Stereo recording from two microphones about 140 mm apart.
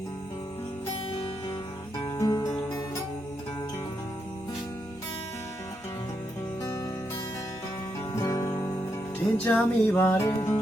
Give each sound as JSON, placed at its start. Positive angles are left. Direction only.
{"t": 2.1, "sound": "music", "side_deg": 25}
{"t": 8.1, "sound": "music", "side_deg": 25}
{"t": 9.1, "sound": "music", "side_deg": 10}